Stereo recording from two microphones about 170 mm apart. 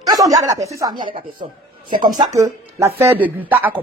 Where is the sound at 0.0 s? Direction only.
20° right (ahead or behind).